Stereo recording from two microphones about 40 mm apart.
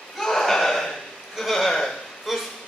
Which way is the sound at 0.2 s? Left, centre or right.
Centre.